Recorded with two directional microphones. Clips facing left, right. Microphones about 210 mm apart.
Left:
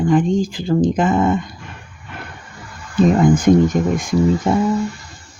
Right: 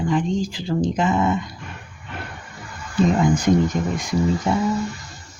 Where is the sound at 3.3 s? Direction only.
50° left (ahead or behind).